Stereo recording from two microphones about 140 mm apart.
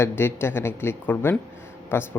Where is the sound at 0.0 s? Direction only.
15° left (ahead or behind).